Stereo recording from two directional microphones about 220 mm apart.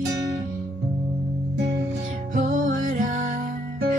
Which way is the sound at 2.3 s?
35° right (ahead or behind).